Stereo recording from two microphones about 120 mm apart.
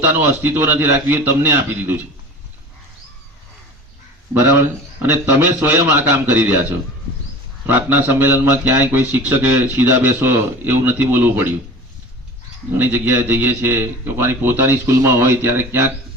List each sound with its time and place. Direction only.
0.0 s a man's voice: 15° right (ahead or behind)
5.0 s a man's voice: 15° right (ahead or behind)
12.7 s a man's voice: 15° right (ahead or behind)